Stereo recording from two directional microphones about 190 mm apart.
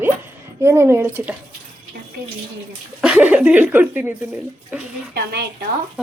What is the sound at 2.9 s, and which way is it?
Speech, 5° right (ahead or behind).